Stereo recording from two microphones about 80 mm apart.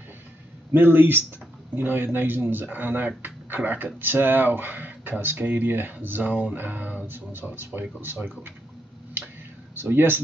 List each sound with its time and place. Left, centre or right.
0.7 s speech: right
9.8 s speech: right